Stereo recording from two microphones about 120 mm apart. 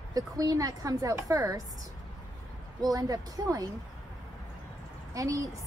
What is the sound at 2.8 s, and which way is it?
Speech, 30° right (ahead or behind).